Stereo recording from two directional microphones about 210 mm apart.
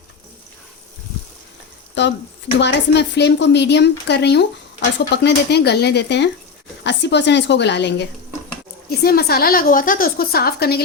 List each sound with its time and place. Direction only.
2.0 s a woman's voice: 60° left (ahead or behind)
9.0 s a woman's voice: 45° left (ahead or behind)